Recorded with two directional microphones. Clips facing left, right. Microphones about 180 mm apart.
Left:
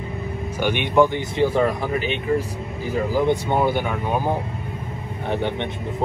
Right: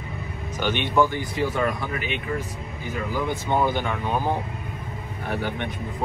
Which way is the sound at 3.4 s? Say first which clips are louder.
Left 2 dB; 15° left (ahead or behind).